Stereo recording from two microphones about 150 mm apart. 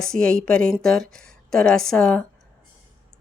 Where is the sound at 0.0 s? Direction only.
5° left (ahead or behind).